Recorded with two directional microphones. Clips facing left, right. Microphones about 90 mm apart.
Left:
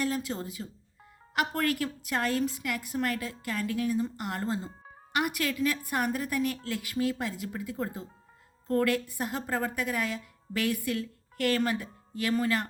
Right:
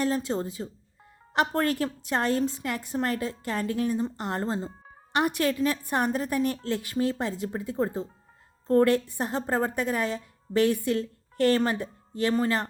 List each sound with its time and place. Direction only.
0.0 s a woman's voice: 30° right (ahead or behind)